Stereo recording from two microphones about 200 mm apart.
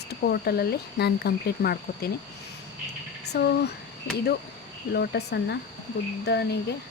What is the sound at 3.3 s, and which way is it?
Speech, 55° left (ahead or behind).